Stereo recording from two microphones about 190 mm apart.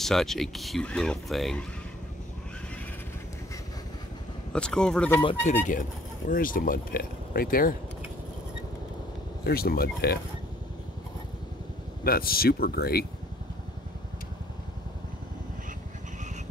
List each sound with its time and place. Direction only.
0.0 s speech: centre (ahead or behind)
4.5 s speech: 5° left (ahead or behind)
5.2 s speech: 30° left (ahead or behind)
5.7 s speech: 45° left (ahead or behind)
9.4 s speech: 55° left (ahead or behind)
12.0 s speech: 50° left (ahead or behind)